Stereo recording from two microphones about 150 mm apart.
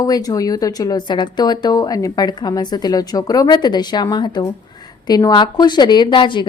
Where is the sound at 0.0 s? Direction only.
25° left (ahead or behind).